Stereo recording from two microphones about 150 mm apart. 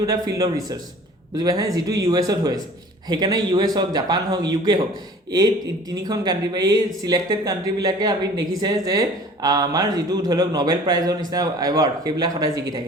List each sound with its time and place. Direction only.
0.0 s speech: 25° right (ahead or behind)
5.9 s speech: 25° right (ahead or behind)